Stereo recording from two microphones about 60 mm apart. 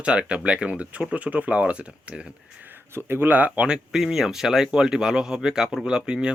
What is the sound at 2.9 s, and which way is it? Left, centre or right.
Speech, right.